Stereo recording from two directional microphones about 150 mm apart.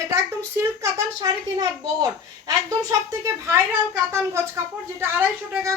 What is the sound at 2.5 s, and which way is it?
A woman's voice, 25° right (ahead or behind).